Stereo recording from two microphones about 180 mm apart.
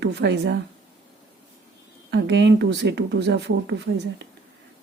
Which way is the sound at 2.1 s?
70° right (ahead or behind).